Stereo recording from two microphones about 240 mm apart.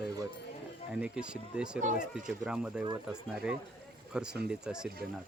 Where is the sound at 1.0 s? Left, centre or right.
Centre.